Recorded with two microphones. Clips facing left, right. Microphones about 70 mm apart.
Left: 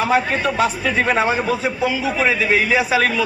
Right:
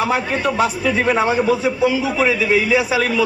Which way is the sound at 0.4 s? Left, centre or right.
Right.